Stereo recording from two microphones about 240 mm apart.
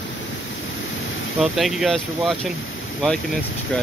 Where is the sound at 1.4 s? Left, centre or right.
Centre.